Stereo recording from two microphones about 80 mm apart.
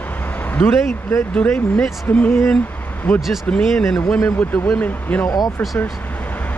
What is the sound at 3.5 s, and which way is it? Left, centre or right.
Speech, centre.